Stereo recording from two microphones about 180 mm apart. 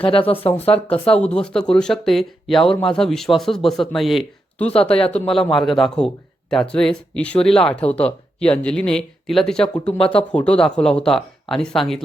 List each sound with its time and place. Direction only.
0.0 s speech: 30° left (ahead or behind)
1.2 s speech: 5° left (ahead or behind)